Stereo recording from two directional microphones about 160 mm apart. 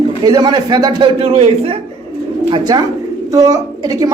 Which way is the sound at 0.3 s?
25° right (ahead or behind).